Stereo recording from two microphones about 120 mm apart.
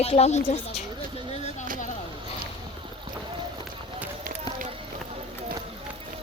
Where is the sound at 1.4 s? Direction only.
85° left.